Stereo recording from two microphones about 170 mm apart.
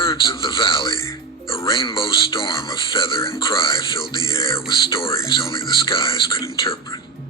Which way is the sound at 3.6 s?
20° left (ahead or behind).